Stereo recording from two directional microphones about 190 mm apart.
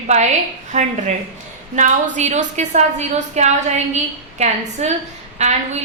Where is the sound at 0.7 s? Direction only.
40° right (ahead or behind).